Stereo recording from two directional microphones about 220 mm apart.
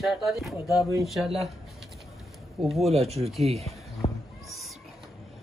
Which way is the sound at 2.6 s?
Centre (ahead or behind).